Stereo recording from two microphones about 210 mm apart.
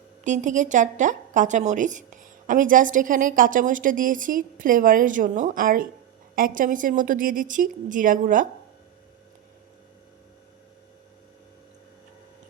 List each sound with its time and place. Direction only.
0.3 s a woman's voice: 35° right (ahead or behind)